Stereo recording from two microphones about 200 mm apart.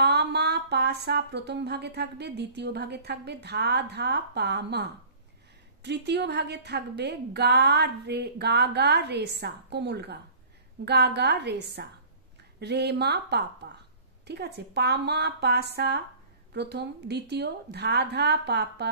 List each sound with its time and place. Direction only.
0.0 s speech: 55° right (ahead or behind)